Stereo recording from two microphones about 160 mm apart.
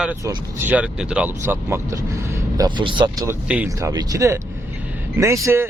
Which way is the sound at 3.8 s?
20° right (ahead or behind).